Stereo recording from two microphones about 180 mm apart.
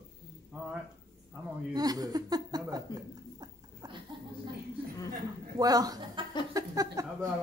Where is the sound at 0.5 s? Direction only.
10° right (ahead or behind).